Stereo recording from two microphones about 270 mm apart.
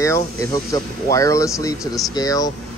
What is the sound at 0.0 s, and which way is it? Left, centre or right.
Speech, centre.